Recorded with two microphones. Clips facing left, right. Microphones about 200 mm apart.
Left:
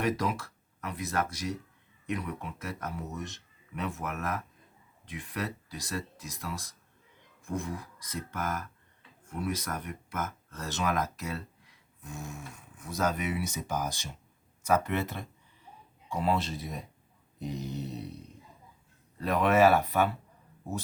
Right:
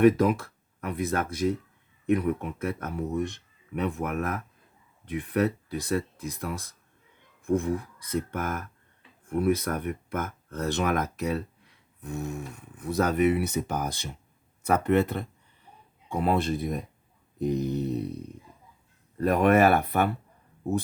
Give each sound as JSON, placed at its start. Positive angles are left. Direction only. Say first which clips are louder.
{"t": 0.0, "sound": "speech", "louder": "right 10 dB", "side_deg": -55}
{"t": 19.1, "sound": "speech", "louder": "right 5 dB", "side_deg": -50}